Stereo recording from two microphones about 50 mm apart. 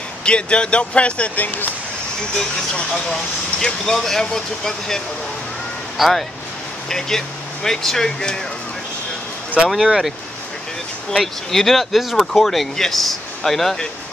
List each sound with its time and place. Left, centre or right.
0.2 s speech: left
2.3 s speech: centre
9.8 s speech: centre
11.1 s speech: centre